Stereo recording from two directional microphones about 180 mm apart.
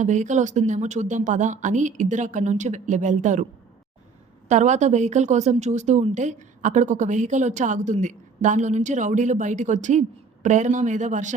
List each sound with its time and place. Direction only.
0.0 s a woman's voice: 40° right (ahead or behind)
4.4 s a woman's voice: 40° right (ahead or behind)